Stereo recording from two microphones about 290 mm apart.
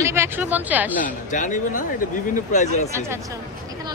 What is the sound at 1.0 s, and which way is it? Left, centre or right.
Speech, left.